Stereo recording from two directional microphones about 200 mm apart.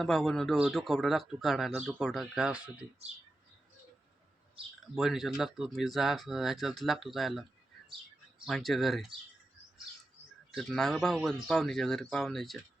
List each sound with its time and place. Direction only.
0.0 s speech: centre (ahead or behind)
4.6 s speech: 25° right (ahead or behind)
4.9 s speech: centre (ahead or behind)
8.4 s speech: centre (ahead or behind)
10.5 s speech: centre (ahead or behind)